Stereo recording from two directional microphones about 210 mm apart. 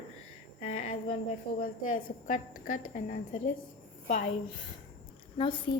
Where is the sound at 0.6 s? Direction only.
30° left (ahead or behind).